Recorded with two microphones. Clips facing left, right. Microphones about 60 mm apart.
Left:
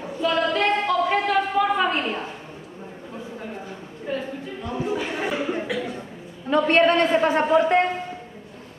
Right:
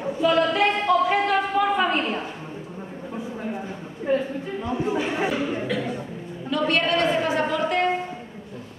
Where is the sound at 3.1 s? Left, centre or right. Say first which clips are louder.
Right 4 dB; centre.